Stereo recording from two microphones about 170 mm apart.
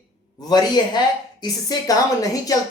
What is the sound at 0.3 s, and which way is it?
A woman's voice, 25° left (ahead or behind).